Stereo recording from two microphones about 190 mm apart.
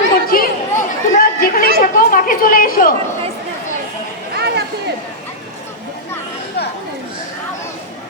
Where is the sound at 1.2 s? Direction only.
50° left (ahead or behind).